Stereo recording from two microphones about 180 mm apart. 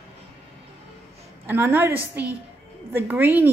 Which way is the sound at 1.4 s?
10° right (ahead or behind).